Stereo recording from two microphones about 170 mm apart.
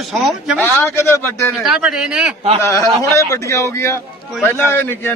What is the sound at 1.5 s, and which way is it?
Speech, centre (ahead or behind).